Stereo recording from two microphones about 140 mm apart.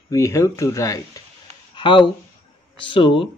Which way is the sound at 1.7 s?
35° left (ahead or behind).